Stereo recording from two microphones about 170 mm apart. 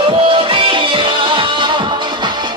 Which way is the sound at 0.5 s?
30° right (ahead or behind).